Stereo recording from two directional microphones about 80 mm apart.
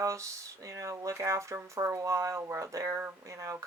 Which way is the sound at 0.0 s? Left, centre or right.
Right.